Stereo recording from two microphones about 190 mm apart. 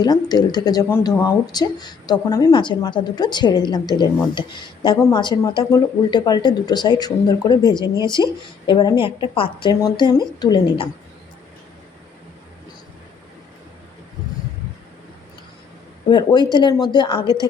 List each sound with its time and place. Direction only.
0.0 s speech: 20° left (ahead or behind)
16.0 s speech: 25° left (ahead or behind)